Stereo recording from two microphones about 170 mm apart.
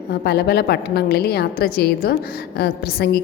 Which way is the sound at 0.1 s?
75° left (ahead or behind).